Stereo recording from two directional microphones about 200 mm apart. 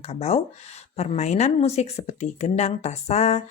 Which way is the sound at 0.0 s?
30° left (ahead or behind).